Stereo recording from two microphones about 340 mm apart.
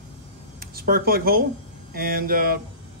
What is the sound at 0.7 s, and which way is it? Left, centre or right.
Speech, right.